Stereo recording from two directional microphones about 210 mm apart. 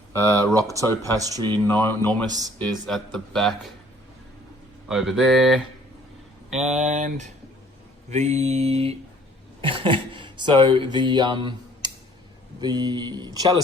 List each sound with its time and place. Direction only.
0.2 s speech: 15° right (ahead or behind)
1.6 s speech: 10° left (ahead or behind)
2.2 s speech: 20° right (ahead or behind)
2.6 s speech: centre (ahead or behind)
4.9 s speech: centre (ahead or behind)
6.7 s mantra: 35° right (ahead or behind)
9.6 s speech: 25° right (ahead or behind)